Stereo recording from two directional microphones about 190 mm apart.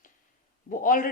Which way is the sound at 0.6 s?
45° left (ahead or behind).